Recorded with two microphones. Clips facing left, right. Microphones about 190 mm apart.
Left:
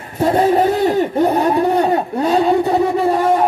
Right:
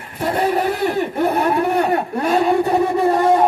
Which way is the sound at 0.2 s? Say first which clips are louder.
Left 5 dB; 25° left (ahead or behind).